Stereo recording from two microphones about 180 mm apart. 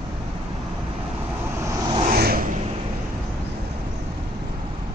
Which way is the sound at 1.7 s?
20° right (ahead or behind).